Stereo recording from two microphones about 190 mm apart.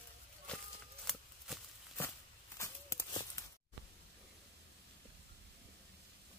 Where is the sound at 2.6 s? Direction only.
15° left (ahead or behind).